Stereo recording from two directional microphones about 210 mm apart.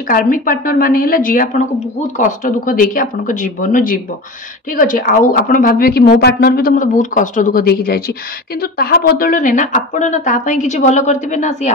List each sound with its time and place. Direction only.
0.1 s speech: 40° left (ahead or behind)